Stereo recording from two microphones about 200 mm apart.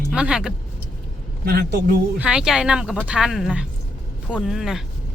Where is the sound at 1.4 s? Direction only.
55° right (ahead or behind).